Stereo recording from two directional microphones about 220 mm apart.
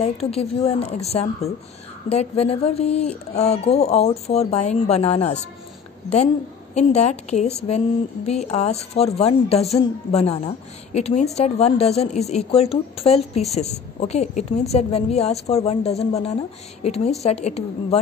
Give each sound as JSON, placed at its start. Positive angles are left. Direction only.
{"t": 0.0, "sound": "a woman's voice", "side_deg": 25}
{"t": 6.7, "sound": "a woman's voice", "side_deg": 30}